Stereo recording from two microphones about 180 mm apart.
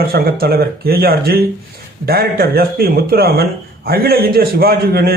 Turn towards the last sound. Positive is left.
turn(degrees=-60)  # may be behind; listen again after turning